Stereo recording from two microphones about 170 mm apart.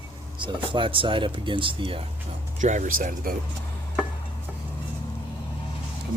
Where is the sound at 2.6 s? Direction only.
45° right (ahead or behind).